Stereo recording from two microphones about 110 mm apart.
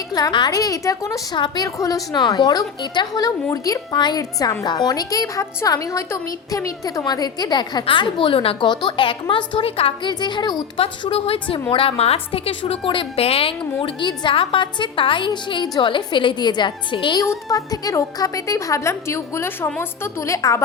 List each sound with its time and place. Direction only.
0.1 s a woman's voice: 40° left (ahead or behind); by 10.1 s 60° left (ahead or behind)
10.1 s a woman's voice: 40° left (ahead or behind)
10.8 s a woman's voice: 60° left (ahead or behind)
17.2 s a woman's voice: 30° left (ahead or behind)